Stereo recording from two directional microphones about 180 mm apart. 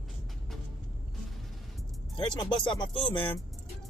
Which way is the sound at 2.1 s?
25° left (ahead or behind).